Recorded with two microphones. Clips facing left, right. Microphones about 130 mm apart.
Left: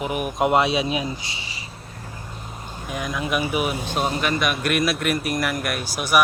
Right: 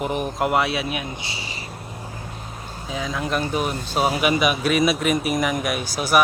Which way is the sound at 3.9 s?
5° right (ahead or behind).